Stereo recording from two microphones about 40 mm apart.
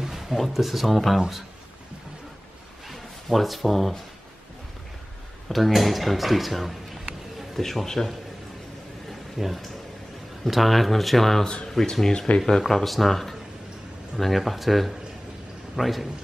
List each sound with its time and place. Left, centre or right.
0.0 s a sound: centre
0.4 s speech: centre
2.9 s speech: centre
5.5 s speech: centre
9.4 s speech: centre
11.4 s speech: centre